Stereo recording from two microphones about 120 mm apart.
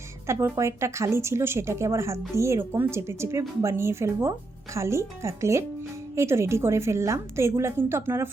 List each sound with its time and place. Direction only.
0.3 s speech: 25° right (ahead or behind)